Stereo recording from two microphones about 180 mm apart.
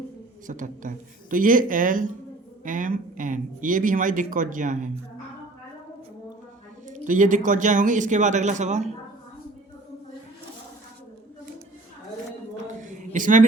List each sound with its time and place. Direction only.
0.4 s speech: 45° right (ahead or behind)
6.8 s speech: 45° right (ahead or behind)
13.0 s a sound: 45° right (ahead or behind)